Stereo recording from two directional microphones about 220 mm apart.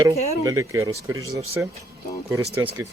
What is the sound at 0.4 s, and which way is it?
Speech, 15° right (ahead or behind).